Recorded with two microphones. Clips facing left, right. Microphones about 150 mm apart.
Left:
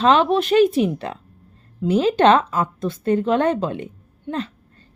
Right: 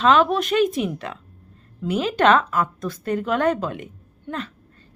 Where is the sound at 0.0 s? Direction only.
30° left (ahead or behind).